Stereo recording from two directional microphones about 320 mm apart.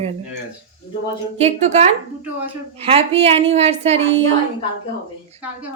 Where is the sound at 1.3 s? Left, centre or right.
Centre.